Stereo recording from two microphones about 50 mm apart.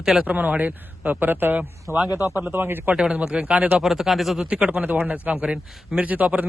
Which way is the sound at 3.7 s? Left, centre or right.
Centre.